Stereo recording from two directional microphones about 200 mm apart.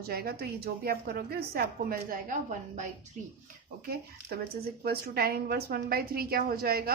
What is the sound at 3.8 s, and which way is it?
A woman's voice, 50° right (ahead or behind).